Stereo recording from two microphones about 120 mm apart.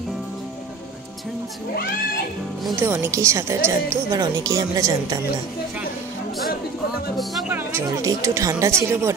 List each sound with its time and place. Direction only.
2.8 s a woman's voice: 20° right (ahead or behind)
7.4 s speech: 15° right (ahead or behind)
7.9 s a woman's voice: 30° right (ahead or behind)